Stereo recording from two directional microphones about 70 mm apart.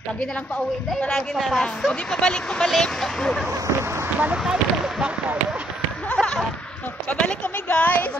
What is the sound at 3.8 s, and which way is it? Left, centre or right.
Speech, right.